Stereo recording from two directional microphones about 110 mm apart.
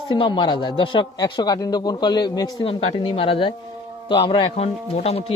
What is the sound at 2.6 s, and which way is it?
A woman's voice, 55° left (ahead or behind).